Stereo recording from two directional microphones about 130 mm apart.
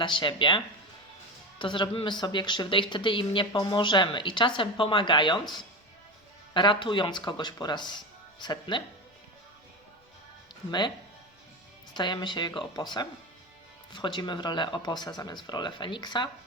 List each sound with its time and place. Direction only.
0.0 s speech: 40° left (ahead or behind)
10.7 s speech: 35° left (ahead or behind)
11.9 s speech: 35° left (ahead or behind)